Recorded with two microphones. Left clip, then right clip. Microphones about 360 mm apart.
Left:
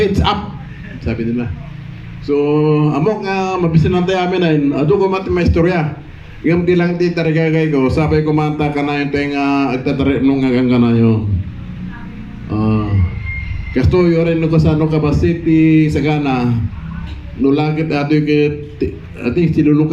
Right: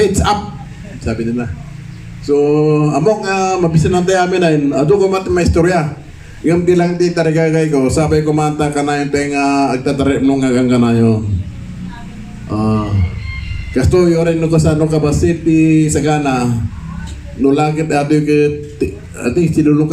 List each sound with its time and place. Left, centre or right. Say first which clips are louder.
0.0 s a sound: right 2 dB; right
1.0 s a man's voice: right 1 dB; right
12.5 s a man's voice: right 1 dB; right